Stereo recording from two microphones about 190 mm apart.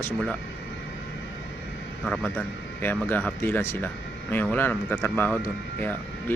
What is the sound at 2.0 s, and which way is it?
Speech, 5° left (ahead or behind).